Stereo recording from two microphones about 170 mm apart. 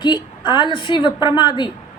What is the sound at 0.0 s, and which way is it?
Speech, 25° left (ahead or behind).